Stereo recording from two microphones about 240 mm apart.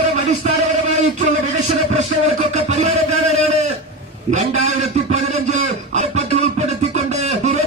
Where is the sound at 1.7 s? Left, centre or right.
Right.